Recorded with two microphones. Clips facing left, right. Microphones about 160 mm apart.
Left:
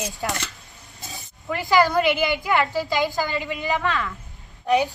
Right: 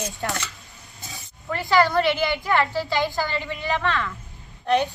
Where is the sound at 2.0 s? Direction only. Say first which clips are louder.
Left 1 dB; 15° left (ahead or behind).